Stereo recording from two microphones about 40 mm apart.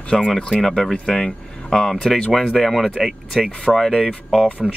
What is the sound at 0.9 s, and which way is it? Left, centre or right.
Speech, left.